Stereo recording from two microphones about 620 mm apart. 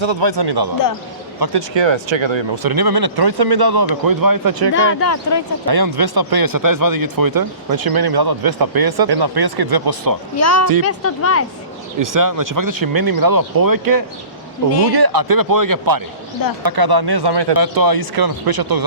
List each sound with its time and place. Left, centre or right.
0.0 s speech: right
4.7 s speech: centre
5.6 s speech: right
10.3 s speech: left
11.9 s speech: right